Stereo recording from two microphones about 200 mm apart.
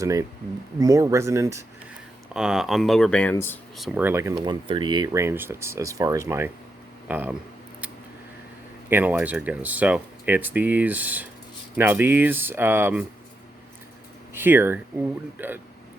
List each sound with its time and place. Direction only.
0.0 s speech: 15° right (ahead or behind)
2.3 s speech: 5° right (ahead or behind)
3.8 s speech: 5° right (ahead or behind)
8.9 s speech: 10° right (ahead or behind)
14.3 s speech: 10° right (ahead or behind)